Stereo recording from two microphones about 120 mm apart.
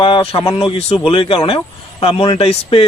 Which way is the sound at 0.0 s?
50° left (ahead or behind).